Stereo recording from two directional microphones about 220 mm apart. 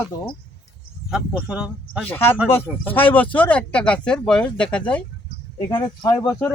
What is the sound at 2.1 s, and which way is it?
Speech, 10° left (ahead or behind).